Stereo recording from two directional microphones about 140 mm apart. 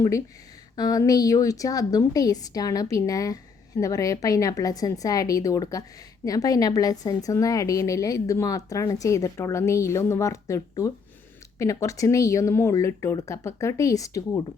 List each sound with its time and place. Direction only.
0.8 s a woman's voice: 25° left (ahead or behind)